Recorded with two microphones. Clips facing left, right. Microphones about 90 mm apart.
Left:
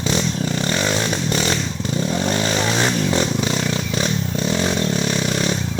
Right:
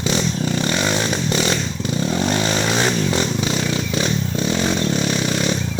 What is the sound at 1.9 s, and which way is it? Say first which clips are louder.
Vehicle: right 1 dB; 15° right (ahead or behind).